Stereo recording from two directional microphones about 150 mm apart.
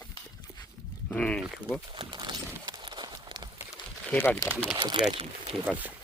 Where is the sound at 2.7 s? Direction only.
30° right (ahead or behind).